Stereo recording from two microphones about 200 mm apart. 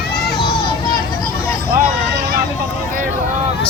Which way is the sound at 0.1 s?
50° left (ahead or behind).